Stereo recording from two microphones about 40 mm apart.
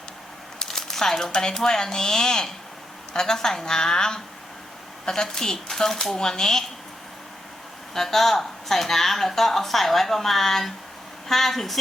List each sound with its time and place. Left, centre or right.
0.6 s crumpling: centre
1.3 s speech: centre
7.9 s speech: centre